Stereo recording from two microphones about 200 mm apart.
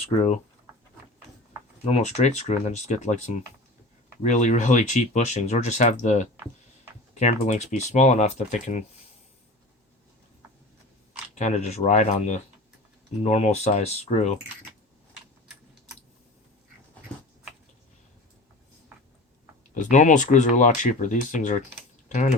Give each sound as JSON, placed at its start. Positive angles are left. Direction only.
{"t": 1.8, "sound": "speech", "side_deg": 30}
{"t": 11.3, "sound": "speech", "side_deg": 35}
{"t": 19.7, "sound": "speech", "side_deg": 40}